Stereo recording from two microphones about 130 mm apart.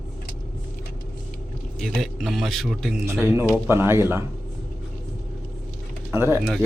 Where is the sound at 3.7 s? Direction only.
20° right (ahead or behind).